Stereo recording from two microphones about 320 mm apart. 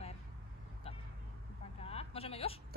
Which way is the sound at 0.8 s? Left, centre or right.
Centre.